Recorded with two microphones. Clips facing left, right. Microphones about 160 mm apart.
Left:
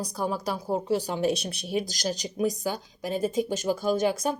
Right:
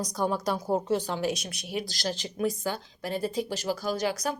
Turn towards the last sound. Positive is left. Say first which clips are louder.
# left 4 dB
turn(degrees=25)  # may be behind; listen again after turning